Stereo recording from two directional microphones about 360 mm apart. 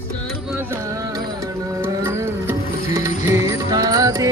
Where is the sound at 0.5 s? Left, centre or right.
Centre.